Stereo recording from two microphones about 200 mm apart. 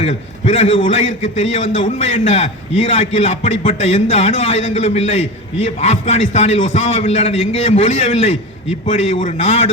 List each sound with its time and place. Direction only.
0.0 s a man's voice: 30° left (ahead or behind)